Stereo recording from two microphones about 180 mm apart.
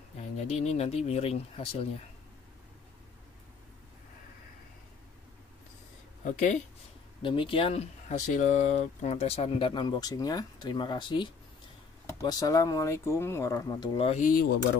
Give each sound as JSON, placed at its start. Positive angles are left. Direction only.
{"t": 0.4, "sound": "speech", "side_deg": 35}
{"t": 6.2, "sound": "speech", "side_deg": 45}
{"t": 7.2, "sound": "speech", "side_deg": 30}
{"t": 14.2, "sound": "speech", "side_deg": 55}